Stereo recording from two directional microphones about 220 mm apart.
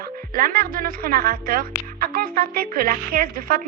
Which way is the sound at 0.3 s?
40° right (ahead or behind).